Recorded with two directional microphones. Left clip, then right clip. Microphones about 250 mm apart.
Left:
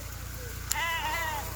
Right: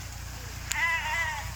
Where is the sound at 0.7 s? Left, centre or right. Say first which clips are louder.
Right 3 dB; left.